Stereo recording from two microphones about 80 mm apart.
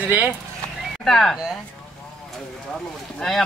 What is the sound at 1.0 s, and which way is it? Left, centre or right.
Speech, centre.